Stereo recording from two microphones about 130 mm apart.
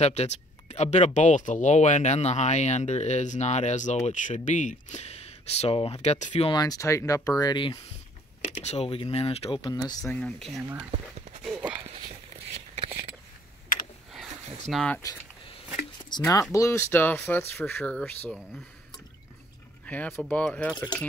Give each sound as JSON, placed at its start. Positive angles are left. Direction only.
{"t": 0.0, "sound": "speech", "side_deg": 60}
{"t": 6.0, "sound": "speech", "side_deg": 65}
{"t": 6.4, "sound": "speech", "side_deg": 30}
{"t": 8.5, "sound": "speech", "side_deg": 55}
{"t": 10.1, "sound": "speech", "side_deg": 5}
{"t": 11.6, "sound": "a sound", "side_deg": -30}
{"t": 12.5, "sound": "a sound", "side_deg": -50}
{"t": 14.7, "sound": "speech", "side_deg": 5}
{"t": 16.3, "sound": "speech", "side_deg": 25}
{"t": 19.9, "sound": "speech", "side_deg": 10}
{"t": 20.7, "sound": "speech", "side_deg": 30}